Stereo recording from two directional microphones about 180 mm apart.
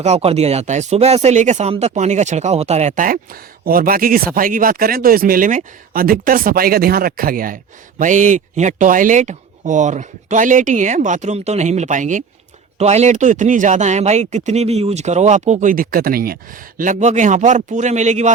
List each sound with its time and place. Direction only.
0.0 s speech: 35° right (ahead or behind)